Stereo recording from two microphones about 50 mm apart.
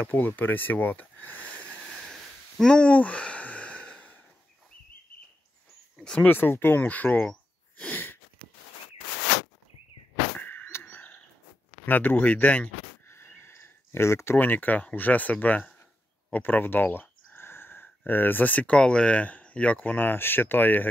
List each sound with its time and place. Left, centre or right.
0.0 s speech: left
1.7 s a sound: centre
6.2 s speech: left
6.8 s speech: left
7.9 s sniff: left
10.4 s bird: left
11.8 s speech: left
13.4 s a sound: left
14.4 s speech: left
20.0 s speech: left